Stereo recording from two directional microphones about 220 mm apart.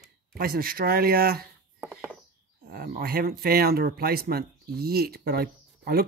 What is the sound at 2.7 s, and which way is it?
Speech, 40° right (ahead or behind).